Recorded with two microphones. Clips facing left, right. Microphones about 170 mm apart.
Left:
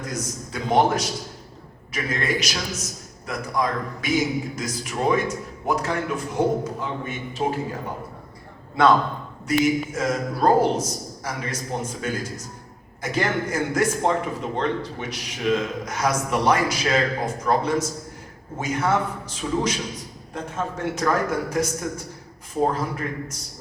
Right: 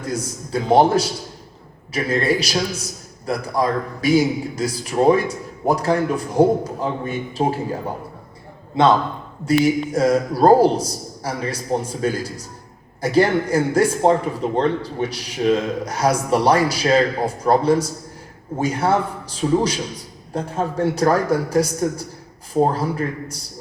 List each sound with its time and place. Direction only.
0.0 s speech: 30° right (ahead or behind)
8.8 s a man's voice: 20° right (ahead or behind)
9.5 s speech: 35° right (ahead or behind)